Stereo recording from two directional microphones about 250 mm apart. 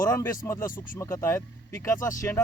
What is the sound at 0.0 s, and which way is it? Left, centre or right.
Speech, centre.